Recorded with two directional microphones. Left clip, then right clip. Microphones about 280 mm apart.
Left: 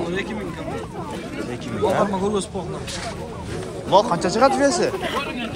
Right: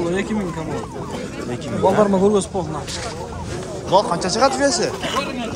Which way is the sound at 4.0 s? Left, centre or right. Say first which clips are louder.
Even; centre.